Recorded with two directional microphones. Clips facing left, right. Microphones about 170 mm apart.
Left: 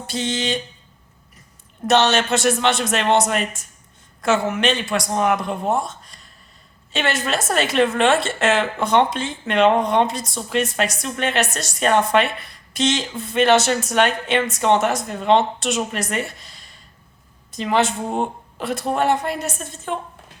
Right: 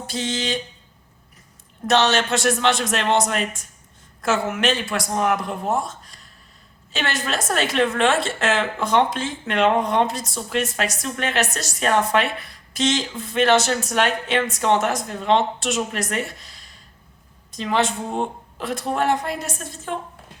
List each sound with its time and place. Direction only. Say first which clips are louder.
0.1 s a woman's voice: left 2 dB; centre (ahead or behind)
1.9 s a woman's voice: left 2 dB; centre (ahead or behind)